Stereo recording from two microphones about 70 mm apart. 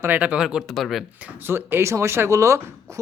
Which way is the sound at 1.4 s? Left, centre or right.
Right.